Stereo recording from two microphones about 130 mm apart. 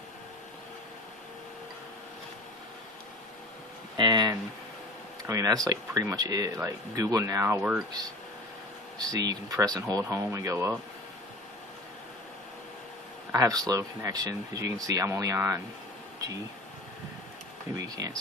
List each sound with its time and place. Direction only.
3.9 s a sound: 35° right (ahead or behind)
5.2 s speech: 25° right (ahead or behind)
9.0 s speech: 30° right (ahead or behind)
13.3 s speech: 25° right (ahead or behind)
17.8 s speech: 30° right (ahead or behind)